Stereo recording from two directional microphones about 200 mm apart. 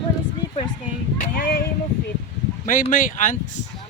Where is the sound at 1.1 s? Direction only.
45° left (ahead or behind).